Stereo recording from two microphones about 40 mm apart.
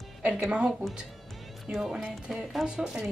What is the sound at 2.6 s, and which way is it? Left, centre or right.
Speech, centre.